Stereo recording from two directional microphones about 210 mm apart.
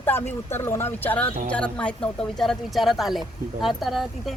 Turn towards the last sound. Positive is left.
turn(degrees=0)  # may be behind; listen again after turning